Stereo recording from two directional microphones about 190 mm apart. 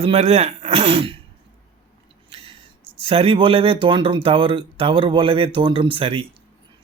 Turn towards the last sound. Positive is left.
turn(degrees=-30)  # may be behind; listen again after turning